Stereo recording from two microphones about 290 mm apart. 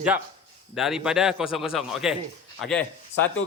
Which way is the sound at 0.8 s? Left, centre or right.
Centre.